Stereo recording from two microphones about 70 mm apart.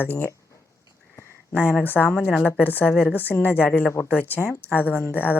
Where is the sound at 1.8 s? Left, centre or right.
Left.